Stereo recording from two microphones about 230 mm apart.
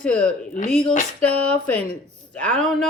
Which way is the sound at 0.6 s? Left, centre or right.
Left.